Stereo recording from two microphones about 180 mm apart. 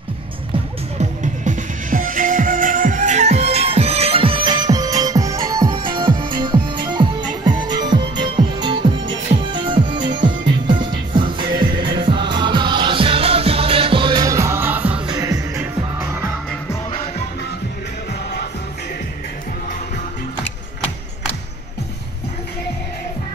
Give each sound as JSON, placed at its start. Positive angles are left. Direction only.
{"t": 0.9, "sound": "music", "side_deg": -45}
{"t": 15.0, "sound": "music", "side_deg": -20}